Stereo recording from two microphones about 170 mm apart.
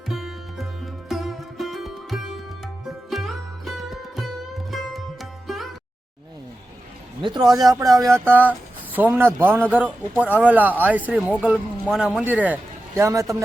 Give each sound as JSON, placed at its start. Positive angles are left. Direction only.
{"t": 0.1, "sound": "music", "side_deg": 0}
{"t": 7.2, "sound": "a man's voice", "side_deg": -25}